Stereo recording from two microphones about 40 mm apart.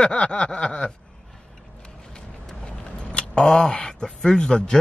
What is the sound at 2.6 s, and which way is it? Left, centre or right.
Vehicle, left.